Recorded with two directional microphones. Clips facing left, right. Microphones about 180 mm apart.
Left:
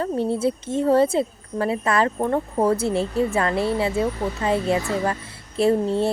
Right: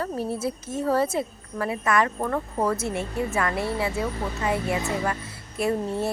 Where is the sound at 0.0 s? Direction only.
25° left (ahead or behind).